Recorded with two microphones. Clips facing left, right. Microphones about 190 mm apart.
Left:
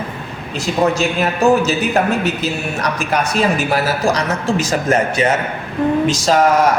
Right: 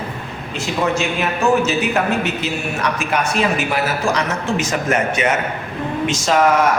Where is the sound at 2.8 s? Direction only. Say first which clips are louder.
Left 1 dB; 35° left (ahead or behind).